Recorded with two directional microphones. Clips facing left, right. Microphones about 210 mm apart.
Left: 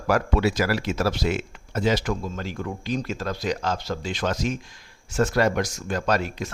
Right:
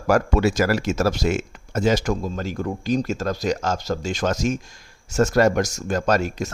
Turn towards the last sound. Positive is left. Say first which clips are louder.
# right 3 dB
turn(degrees=-45)  # may be behind; listen again after turning